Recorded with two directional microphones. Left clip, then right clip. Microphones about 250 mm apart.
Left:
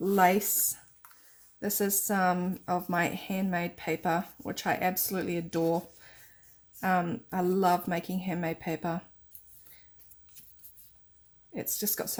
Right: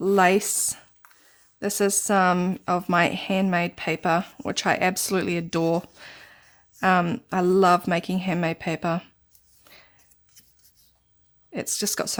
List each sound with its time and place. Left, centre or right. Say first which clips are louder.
0.0 s speech: right 5 dB; right
11.5 s speech: right 8 dB; right